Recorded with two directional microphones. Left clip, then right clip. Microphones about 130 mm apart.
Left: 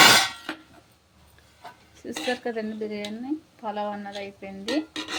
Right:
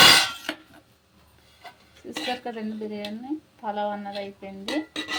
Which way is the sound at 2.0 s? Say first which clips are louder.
Left 2 dB; 20° left (ahead or behind).